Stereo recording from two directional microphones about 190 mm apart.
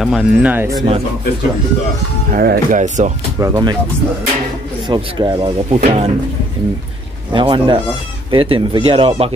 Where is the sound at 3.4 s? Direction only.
20° right (ahead or behind).